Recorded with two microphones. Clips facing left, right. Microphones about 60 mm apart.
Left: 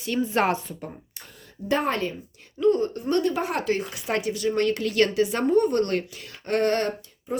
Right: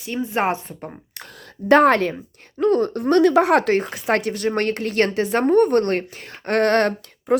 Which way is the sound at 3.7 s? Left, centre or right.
Right.